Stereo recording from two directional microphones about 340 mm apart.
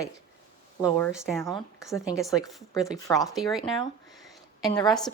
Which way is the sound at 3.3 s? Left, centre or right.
Centre.